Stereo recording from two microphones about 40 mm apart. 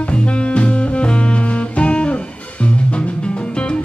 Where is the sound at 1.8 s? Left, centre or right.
Left.